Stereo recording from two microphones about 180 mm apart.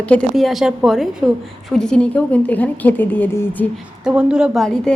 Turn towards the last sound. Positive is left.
turn(degrees=5)  # may be behind; listen again after turning